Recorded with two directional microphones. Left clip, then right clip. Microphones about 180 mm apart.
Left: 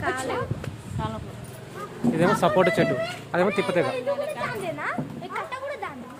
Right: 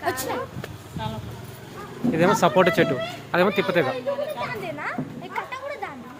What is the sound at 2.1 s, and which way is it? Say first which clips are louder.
Speech: right 2 dB; 15° right (ahead or behind).